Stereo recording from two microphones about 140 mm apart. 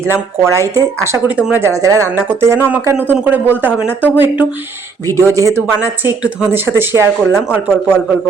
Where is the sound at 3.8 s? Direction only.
10° left (ahead or behind).